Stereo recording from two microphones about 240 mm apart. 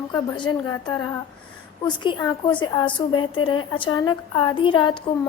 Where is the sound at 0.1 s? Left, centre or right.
Centre.